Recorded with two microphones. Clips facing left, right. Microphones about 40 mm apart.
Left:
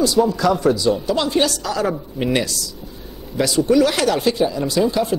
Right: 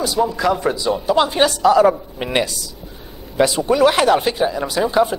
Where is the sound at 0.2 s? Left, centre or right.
Centre.